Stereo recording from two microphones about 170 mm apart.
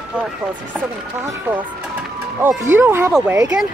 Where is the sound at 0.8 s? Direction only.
15° right (ahead or behind).